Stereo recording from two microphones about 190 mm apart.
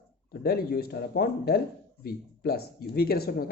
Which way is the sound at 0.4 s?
55° left (ahead or behind).